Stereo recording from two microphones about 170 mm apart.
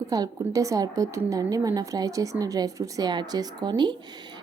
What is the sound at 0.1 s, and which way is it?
Speech, 20° right (ahead or behind).